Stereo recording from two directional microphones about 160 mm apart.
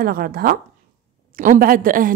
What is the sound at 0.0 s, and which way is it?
A woman's voice, 65° right (ahead or behind).